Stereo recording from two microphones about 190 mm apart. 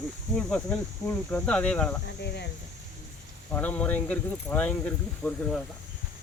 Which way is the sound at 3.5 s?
10° left (ahead or behind).